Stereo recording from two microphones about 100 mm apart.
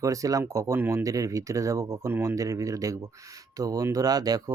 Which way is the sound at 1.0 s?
35° right (ahead or behind).